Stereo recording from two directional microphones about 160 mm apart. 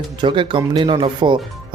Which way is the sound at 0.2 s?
30° right (ahead or behind).